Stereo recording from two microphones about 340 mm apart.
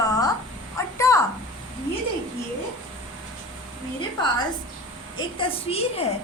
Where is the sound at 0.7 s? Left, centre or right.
Centre.